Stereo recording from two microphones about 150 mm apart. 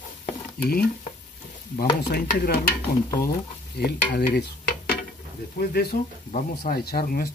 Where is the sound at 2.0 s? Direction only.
90° left.